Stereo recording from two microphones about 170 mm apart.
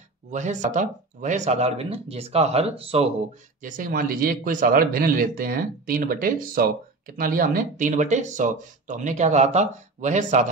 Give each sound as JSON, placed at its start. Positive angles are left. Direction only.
{"t": 0.3, "sound": "speech", "side_deg": -45}
{"t": 3.6, "sound": "a man's voice", "side_deg": -50}